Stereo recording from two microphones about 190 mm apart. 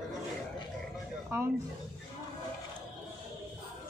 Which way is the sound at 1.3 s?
15° right (ahead or behind).